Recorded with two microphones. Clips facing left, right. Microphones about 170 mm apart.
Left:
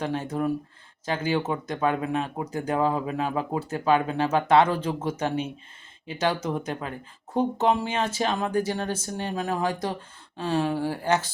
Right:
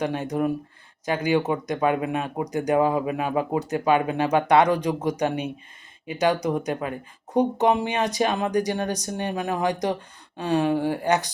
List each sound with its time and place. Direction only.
0.0 s speech: 15° right (ahead or behind)